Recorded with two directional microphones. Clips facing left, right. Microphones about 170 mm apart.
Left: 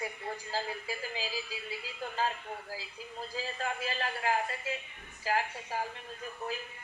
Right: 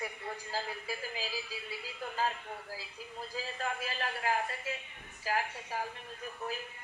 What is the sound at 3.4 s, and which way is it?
A woman's voice, 30° left (ahead or behind).